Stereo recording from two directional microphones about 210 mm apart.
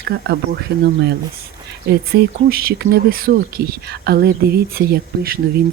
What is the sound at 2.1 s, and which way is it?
Speech, 45° right (ahead or behind).